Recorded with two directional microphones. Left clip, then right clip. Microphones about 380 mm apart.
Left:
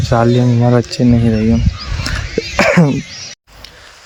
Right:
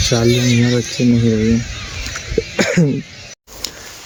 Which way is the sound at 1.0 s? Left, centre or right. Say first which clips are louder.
Left 1 dB; centre.